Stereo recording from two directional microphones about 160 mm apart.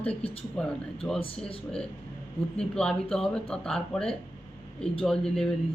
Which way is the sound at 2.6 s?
5° left (ahead or behind).